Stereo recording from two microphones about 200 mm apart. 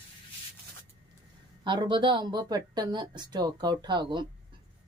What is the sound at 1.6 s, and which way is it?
Speech, 25° right (ahead or behind).